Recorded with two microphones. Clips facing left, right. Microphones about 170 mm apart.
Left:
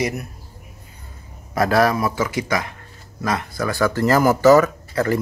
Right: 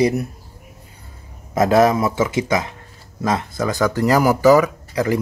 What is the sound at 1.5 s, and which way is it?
Speech, 20° right (ahead or behind).